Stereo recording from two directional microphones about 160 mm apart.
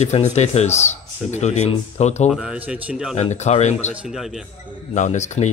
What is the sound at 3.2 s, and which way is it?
Speech, 45° left (ahead or behind).